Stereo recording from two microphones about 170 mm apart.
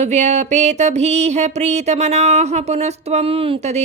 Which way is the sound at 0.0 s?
40° right (ahead or behind).